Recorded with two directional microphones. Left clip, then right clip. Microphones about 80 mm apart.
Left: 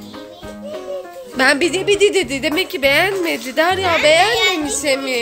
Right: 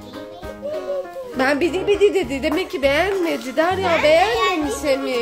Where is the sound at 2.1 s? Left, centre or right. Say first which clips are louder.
Left 2 dB; centre.